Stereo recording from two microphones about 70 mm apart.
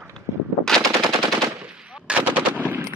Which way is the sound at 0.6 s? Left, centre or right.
Centre.